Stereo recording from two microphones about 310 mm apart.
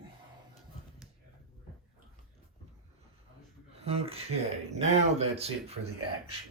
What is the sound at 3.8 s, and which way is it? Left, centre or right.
Speech, centre.